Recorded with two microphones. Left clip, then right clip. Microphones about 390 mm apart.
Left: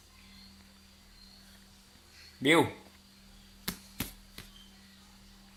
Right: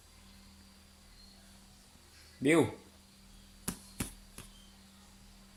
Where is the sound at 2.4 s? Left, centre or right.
Centre.